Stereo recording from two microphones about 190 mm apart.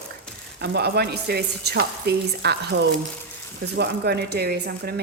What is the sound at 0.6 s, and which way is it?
Speech, 60° right (ahead or behind).